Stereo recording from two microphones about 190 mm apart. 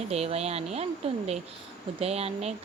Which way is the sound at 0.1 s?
35° right (ahead or behind).